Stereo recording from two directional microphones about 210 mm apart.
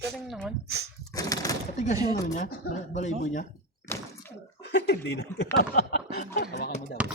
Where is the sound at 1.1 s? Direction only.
15° left (ahead or behind).